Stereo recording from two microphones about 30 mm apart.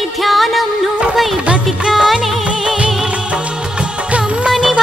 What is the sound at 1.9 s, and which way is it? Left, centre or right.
Music, centre.